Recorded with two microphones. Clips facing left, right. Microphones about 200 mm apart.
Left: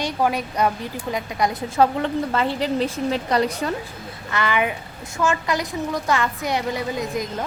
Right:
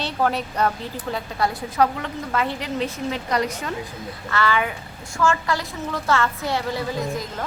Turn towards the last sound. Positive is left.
turn(degrees=20)  # may be behind; listen again after turning